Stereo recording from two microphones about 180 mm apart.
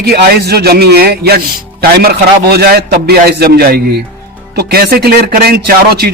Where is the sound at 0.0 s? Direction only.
60° right (ahead or behind).